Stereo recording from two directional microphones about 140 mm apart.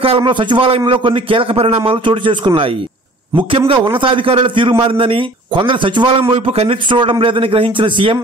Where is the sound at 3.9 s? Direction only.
40° right (ahead or behind).